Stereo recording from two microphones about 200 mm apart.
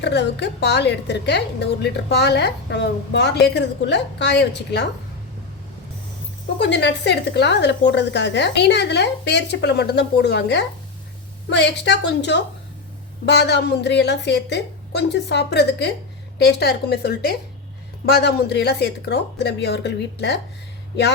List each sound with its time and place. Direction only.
0.0 s a woman's voice: 60° left (ahead or behind)
6.6 s a woman's voice: 60° left (ahead or behind)